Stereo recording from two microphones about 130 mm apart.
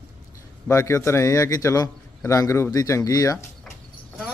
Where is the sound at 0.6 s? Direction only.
25° left (ahead or behind).